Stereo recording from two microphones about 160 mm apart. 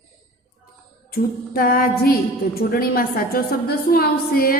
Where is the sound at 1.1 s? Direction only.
65° left (ahead or behind).